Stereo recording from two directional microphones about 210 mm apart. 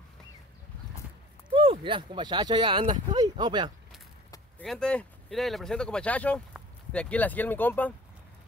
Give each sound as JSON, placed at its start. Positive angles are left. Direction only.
{"t": 1.5, "sound": "speech", "side_deg": -25}
{"t": 4.6, "sound": "speech", "side_deg": 5}